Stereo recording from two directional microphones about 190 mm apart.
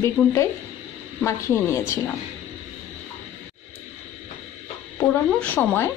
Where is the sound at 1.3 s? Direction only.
15° left (ahead or behind).